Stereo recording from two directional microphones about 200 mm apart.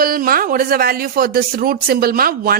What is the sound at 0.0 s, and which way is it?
Speech, 45° right (ahead or behind).